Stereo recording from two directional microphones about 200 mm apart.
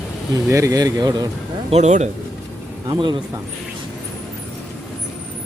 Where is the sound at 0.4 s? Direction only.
15° right (ahead or behind).